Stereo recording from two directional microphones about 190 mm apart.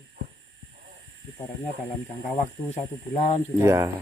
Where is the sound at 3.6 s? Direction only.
15° right (ahead or behind).